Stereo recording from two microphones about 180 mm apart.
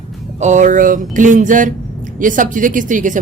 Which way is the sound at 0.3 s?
40° right (ahead or behind).